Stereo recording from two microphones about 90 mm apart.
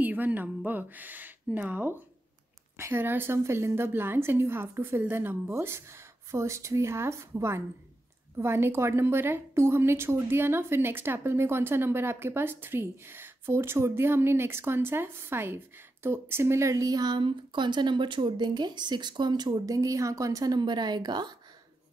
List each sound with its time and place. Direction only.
0.0 s a woman's voice: 20° right (ahead or behind); by 17.2 s 45° right (ahead or behind)
17.2 s speech: 65° right (ahead or behind); by 21.4 s 50° right (ahead or behind)